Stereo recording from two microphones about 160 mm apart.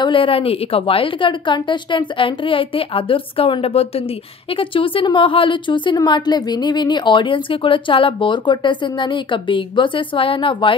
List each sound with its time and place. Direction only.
0.0 s a woman's voice: 30° left (ahead or behind)